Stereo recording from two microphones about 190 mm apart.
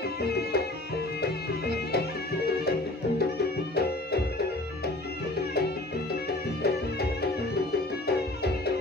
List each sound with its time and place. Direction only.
0.2 s music: 55° left (ahead or behind)
3.2 s music: 55° left (ahead or behind)
6.6 s music: 55° left (ahead or behind)